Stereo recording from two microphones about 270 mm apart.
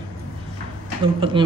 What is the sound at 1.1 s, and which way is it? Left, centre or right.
Speech, centre.